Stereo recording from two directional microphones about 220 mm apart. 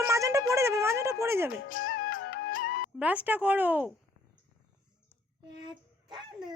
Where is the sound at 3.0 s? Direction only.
5° right (ahead or behind).